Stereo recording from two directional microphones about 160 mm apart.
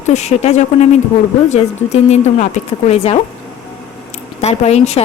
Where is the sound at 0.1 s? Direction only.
45° left (ahead or behind).